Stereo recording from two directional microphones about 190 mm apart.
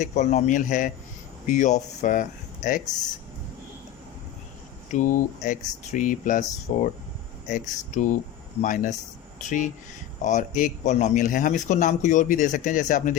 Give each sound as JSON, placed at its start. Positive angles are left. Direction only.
{"t": 0.0, "sound": "a man's voice", "side_deg": 40}
{"t": 4.9, "sound": "a man's voice", "side_deg": 40}